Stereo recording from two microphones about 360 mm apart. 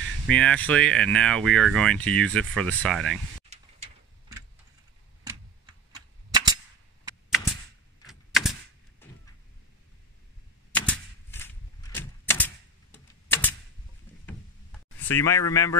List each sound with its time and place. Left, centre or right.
0.3 s speech: centre
3.4 s a sound: centre
5.9 s cap gun: centre
8.1 s typewriter: centre
9.0 s vehicle: centre
10.7 s typewriter: centre
15.0 s speech: centre